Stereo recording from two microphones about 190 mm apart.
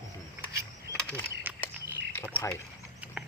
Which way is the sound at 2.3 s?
15° left (ahead or behind).